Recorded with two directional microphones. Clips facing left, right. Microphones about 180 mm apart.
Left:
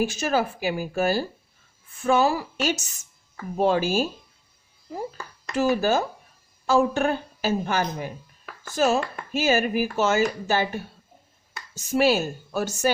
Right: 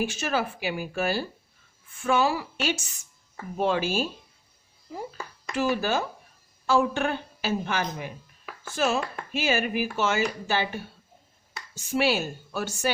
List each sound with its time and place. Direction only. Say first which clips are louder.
0.0 s a woman's voice: left 4 dB; 40° left (ahead or behind)
5.5 s a woman's voice: left 4 dB; 40° left (ahead or behind)